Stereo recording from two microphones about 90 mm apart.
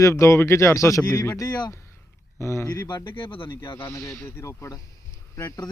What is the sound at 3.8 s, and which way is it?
Speech, 35° left (ahead or behind).